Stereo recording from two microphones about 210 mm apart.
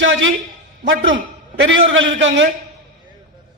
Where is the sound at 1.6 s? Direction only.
65° right (ahead or behind).